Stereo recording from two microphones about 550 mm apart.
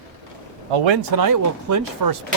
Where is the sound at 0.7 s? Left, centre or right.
Right.